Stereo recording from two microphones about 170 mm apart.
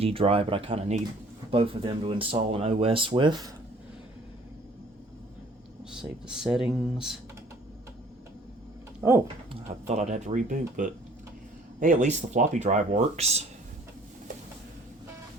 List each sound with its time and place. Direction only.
0.0 s speech: 35° right (ahead or behind)
5.9 s speech: 5° right (ahead or behind)
9.2 s speech: 30° right (ahead or behind)